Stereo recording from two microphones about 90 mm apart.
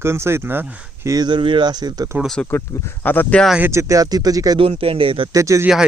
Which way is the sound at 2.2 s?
5° left (ahead or behind).